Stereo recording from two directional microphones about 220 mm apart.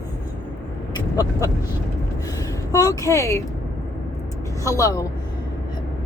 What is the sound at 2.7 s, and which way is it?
Speech, 15° left (ahead or behind).